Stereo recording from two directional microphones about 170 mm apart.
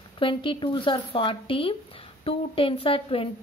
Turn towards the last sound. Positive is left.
turn(degrees=30)  # may be behind; listen again after turning